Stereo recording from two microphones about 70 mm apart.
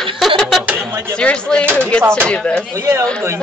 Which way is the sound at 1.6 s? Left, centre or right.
Right.